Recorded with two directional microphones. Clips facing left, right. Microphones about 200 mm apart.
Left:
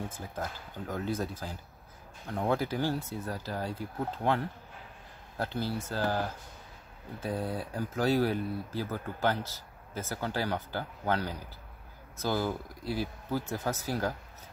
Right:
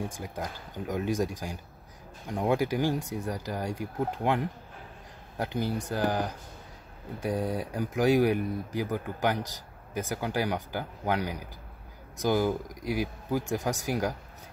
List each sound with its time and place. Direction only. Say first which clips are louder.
0.0 s speech: right 2 dB; 15° right (ahead or behind)